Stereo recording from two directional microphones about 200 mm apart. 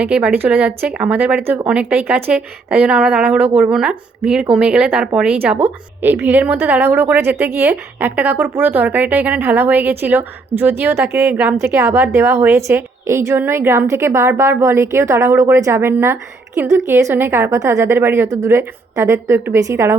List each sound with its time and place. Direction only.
0.0 s a woman's voice: 10° right (ahead or behind)